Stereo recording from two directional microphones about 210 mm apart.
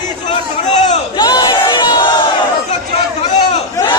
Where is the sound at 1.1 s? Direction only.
20° left (ahead or behind).